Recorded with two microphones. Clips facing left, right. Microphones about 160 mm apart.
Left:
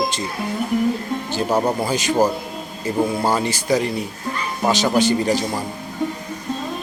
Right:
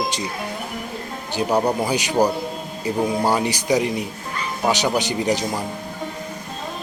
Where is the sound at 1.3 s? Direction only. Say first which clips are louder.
Right 1 dB; 15° right (ahead or behind).